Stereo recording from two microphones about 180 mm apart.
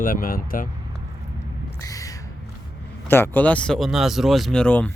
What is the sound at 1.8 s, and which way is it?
Owl, 20° left (ahead or behind).